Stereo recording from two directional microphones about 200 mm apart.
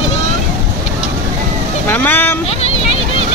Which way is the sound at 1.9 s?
10° left (ahead or behind).